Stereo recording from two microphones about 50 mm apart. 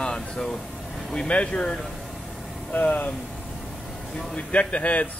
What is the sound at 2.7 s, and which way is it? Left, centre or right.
Speech, left.